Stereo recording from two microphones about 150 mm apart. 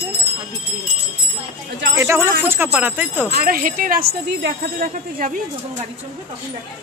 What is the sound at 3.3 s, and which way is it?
Speech, 75° right (ahead or behind).